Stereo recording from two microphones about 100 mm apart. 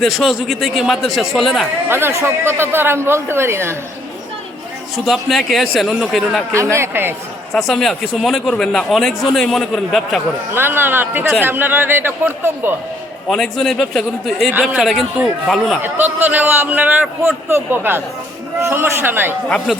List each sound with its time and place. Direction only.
0.0 s a man's voice: centre (ahead or behind)
1.9 s a man's voice: 25° right (ahead or behind)
5.0 s a man's voice: centre (ahead or behind)
6.7 s a man's voice: 25° right (ahead or behind)
7.5 s a man's voice: 5° left (ahead or behind)
10.5 s a man's voice: 20° right (ahead or behind)
13.2 s a man's voice: 5° left (ahead or behind)
15.8 s a man's voice: 20° right (ahead or behind)